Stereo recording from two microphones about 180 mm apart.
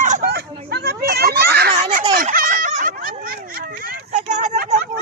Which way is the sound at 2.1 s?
50° right (ahead or behind).